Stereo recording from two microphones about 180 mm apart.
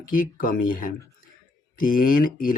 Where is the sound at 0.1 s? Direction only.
50° left (ahead or behind).